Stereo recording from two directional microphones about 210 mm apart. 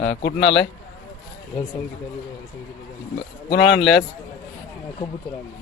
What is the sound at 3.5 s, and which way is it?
Speech, 55° left (ahead or behind).